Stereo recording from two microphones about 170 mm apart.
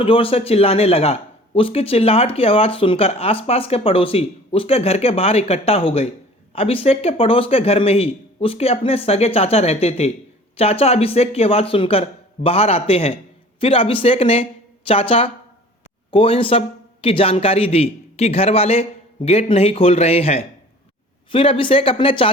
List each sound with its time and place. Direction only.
0.0 s a man's voice: 35° left (ahead or behind)